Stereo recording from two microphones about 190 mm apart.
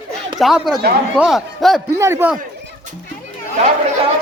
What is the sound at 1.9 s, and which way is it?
Speech, 15° right (ahead or behind).